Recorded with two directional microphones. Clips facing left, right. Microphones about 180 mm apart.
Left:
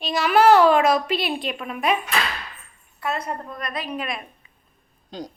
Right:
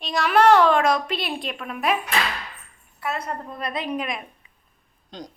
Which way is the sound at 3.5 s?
25° right (ahead or behind).